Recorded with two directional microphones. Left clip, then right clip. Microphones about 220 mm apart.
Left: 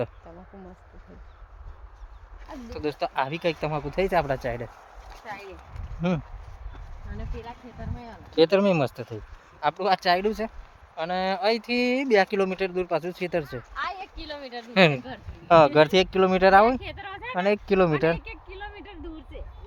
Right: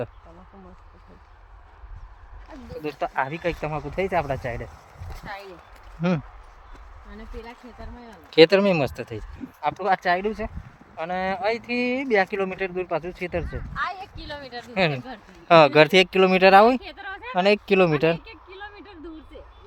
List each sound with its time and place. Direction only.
3.0 s speech: centre (ahead or behind)
6.0 s speech: 10° right (ahead or behind)
8.4 s speech: 10° right (ahead or behind)
9.8 s speech: centre (ahead or behind)
14.7 s speech: 40° left (ahead or behind)
15.0 s speech: 10° right (ahead or behind)
16.8 s a sound: 5° right (ahead or behind)